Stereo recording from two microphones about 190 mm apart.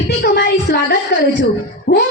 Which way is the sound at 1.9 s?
55° left (ahead or behind).